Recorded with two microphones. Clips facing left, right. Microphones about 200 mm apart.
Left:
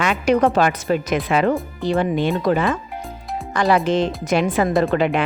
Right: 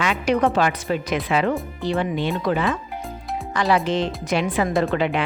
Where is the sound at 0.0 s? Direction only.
50° left (ahead or behind).